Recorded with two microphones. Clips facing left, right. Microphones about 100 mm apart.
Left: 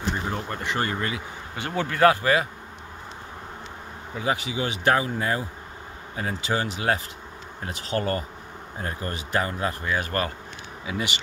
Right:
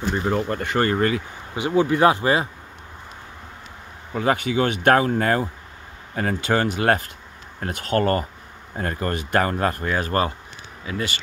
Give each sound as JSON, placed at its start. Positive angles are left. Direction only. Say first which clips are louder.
{"t": 0.3, "sound": "speech", "louder": "right 7 dB", "side_deg": -90}
{"t": 0.7, "sound": "speech", "louder": "right 6 dB", "side_deg": -50}
{"t": 1.6, "sound": "speech", "louder": "right 3 dB", "side_deg": -15}
{"t": 4.1, "sound": "speech", "louder": "right 6 dB", "side_deg": -55}
{"t": 9.9, "sound": "speech", "louder": "right 5 dB", "side_deg": -35}
{"t": 10.9, "sound": "speech", "louder": "right 2 dB", "side_deg": 10}